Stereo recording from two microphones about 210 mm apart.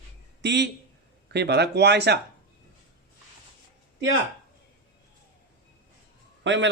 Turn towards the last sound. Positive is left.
turn(degrees=-60)  # may be behind; listen again after turning